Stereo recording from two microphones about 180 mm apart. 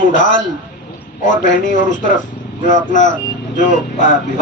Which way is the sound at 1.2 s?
45° left (ahead or behind).